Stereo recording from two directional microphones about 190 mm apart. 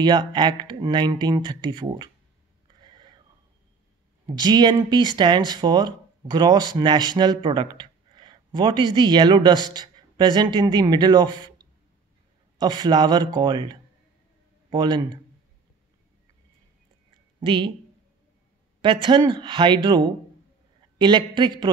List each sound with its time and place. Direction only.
0.0 s speech: 25° right (ahead or behind)
2.7 s a sound: 25° right (ahead or behind)
4.4 s speech: 20° right (ahead or behind)
17.4 s a woman's voice: 25° right (ahead or behind)
18.8 s speech: 25° right (ahead or behind)